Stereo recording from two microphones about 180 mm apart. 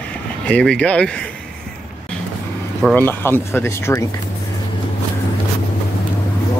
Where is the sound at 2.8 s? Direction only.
10° left (ahead or behind).